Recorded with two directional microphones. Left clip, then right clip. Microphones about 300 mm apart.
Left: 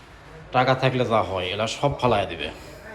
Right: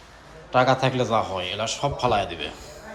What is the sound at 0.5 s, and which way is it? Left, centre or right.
A man's voice, centre.